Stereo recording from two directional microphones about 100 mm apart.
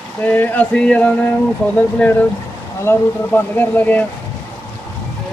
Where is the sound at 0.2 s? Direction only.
20° left (ahead or behind).